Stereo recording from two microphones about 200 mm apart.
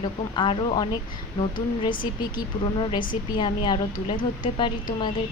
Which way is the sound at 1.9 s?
45° left (ahead or behind).